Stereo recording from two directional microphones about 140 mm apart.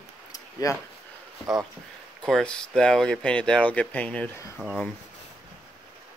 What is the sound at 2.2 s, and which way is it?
Speech, 5° left (ahead or behind).